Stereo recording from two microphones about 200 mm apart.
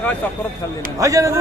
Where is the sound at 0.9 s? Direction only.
15° right (ahead or behind).